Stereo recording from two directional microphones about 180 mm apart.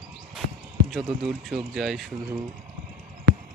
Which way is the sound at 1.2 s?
5° right (ahead or behind).